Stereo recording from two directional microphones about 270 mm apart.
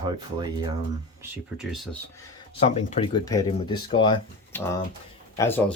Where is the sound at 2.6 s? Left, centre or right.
Left.